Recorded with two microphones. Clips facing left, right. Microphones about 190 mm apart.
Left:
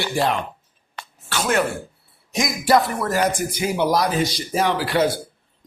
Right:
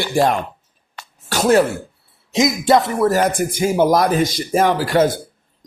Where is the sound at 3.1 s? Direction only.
50° right (ahead or behind).